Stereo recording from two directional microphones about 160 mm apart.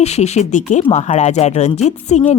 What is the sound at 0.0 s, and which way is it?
Speech, 45° left (ahead or behind).